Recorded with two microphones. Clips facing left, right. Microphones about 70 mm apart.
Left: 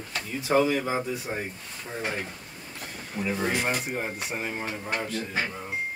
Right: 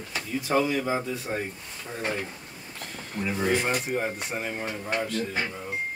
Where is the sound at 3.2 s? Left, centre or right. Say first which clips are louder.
Right 2 dB; centre.